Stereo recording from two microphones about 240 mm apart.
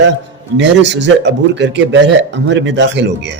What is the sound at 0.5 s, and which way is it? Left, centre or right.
Speech, right.